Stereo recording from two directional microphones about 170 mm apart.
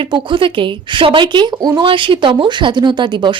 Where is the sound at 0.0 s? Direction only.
30° right (ahead or behind).